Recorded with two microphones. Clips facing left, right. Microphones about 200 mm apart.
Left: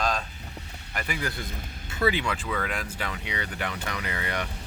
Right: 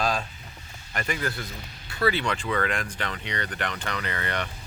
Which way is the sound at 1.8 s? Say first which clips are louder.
Even; 20° left (ahead or behind).